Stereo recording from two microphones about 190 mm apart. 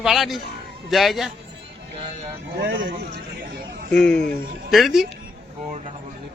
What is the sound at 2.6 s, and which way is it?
Speech, 60° right (ahead or behind).